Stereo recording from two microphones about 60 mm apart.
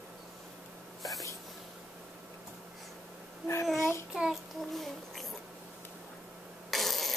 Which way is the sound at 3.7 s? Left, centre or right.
Left.